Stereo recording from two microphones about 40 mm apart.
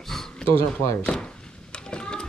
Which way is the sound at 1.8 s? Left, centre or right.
Left.